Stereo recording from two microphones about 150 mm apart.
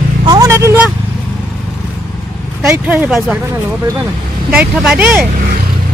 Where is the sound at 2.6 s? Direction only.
10° right (ahead or behind).